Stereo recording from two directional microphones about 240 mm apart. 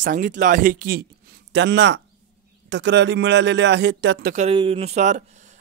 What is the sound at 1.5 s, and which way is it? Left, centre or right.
A man's voice, right.